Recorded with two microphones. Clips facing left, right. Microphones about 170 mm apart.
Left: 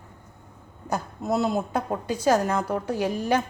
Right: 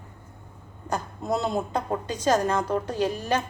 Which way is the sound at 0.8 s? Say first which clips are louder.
Left 1 dB; 5° left (ahead or behind).